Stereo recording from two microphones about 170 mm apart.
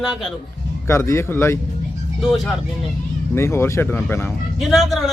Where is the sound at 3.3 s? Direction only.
15° left (ahead or behind).